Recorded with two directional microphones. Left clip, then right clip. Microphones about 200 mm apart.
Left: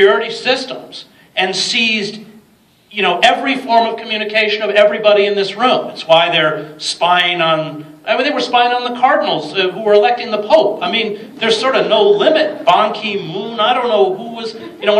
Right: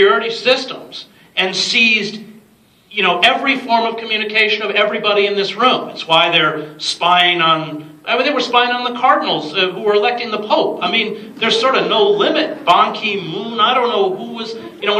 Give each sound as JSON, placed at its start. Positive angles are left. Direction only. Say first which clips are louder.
{"t": 0.0, "sound": "a man's voice", "louder": "left 1 dB", "side_deg": 50}